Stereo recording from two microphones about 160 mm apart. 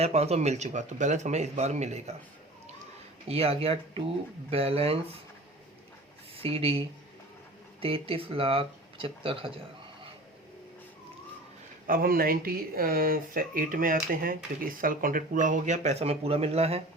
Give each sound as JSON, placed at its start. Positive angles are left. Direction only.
{"t": 0.0, "sound": "speech", "side_deg": -40}
{"t": 3.2, "sound": "speech", "side_deg": -40}
{"t": 6.3, "sound": "speech", "side_deg": -35}
{"t": 11.9, "sound": "speech", "side_deg": -65}